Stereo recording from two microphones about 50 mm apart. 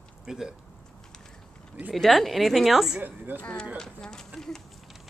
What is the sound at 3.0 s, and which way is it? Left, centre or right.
Speech, right.